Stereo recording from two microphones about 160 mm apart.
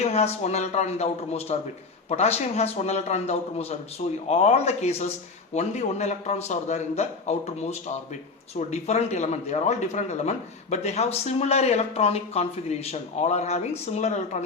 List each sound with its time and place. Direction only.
0.0 s a man's voice: 40° left (ahead or behind)